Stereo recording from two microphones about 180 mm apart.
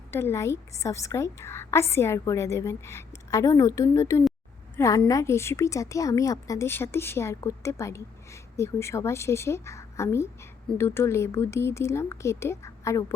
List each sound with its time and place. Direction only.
0.1 s a woman's voice: 15° left (ahead or behind)